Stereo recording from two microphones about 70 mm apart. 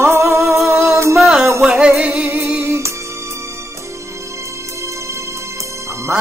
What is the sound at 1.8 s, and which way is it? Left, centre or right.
Music, centre.